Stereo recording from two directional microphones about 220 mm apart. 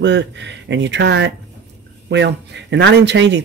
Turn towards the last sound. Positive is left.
turn(degrees=-55)  # may be behind; listen again after turning